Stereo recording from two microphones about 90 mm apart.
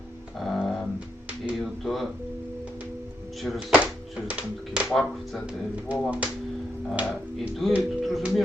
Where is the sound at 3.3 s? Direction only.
Centre (ahead or behind).